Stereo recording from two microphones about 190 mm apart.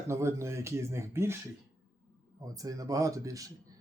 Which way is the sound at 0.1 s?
15° right (ahead or behind).